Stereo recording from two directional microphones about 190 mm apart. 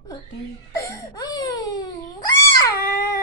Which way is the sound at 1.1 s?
20° left (ahead or behind).